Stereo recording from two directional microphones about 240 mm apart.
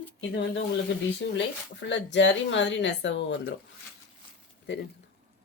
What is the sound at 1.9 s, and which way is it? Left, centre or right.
Speech, left.